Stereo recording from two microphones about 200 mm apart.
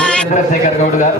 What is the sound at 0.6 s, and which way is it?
Speech, 40° left (ahead or behind).